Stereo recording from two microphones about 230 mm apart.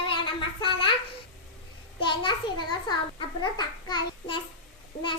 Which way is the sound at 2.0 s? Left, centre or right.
Left.